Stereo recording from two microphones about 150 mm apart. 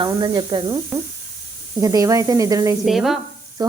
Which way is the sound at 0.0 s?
30° right (ahead or behind).